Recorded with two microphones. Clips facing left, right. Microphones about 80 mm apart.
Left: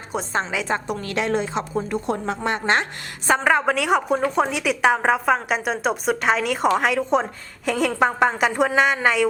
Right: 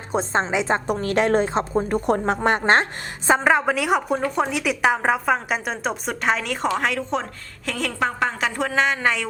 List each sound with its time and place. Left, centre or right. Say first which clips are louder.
0.1 s a woman's voice: right 3 dB; right
0.9 s a woman's voice: right 4 dB; right
3.2 s a woman's voice: even; centre